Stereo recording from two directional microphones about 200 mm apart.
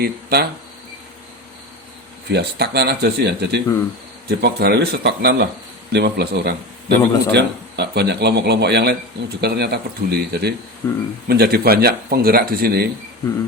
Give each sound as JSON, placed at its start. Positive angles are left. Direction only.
{"t": 0.0, "sound": "speech", "side_deg": -50}
{"t": 2.3, "sound": "a man's voice", "side_deg": -55}
{"t": 10.8, "sound": "speech", "side_deg": 10}
{"t": 11.3, "sound": "speech", "side_deg": -50}